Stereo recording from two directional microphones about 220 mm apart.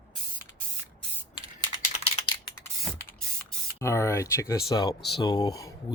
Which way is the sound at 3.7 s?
15° left (ahead or behind).